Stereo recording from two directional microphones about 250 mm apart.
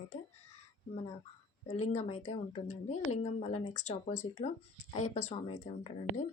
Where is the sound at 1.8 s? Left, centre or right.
Left.